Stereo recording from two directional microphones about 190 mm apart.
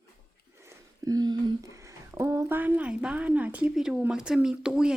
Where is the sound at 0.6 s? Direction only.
20° right (ahead or behind).